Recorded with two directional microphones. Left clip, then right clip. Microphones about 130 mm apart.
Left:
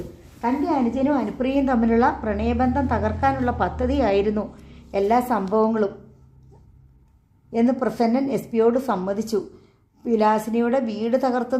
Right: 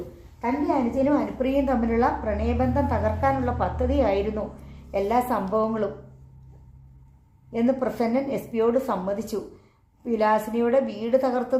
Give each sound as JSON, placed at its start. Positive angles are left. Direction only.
{"t": 1.0, "sound": "a woman's voice", "side_deg": 45}
{"t": 7.5, "sound": "a woman's voice", "side_deg": 50}